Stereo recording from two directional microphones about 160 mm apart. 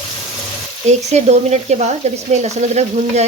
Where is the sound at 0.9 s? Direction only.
45° right (ahead or behind).